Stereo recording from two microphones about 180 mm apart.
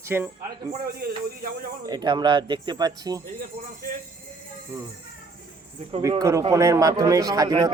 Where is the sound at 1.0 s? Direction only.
60° right (ahead or behind).